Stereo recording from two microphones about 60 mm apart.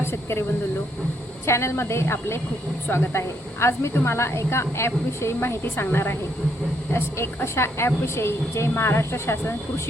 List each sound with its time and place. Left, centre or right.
0.0 s speech: left
1.5 s speech: left
7.4 s speech: left